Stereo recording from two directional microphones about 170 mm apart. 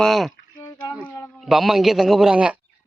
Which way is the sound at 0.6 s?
25° left (ahead or behind).